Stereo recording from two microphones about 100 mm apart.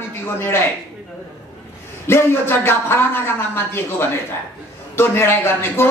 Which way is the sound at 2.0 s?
25° left (ahead or behind).